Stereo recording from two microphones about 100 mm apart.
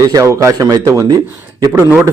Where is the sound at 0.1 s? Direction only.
35° right (ahead or behind).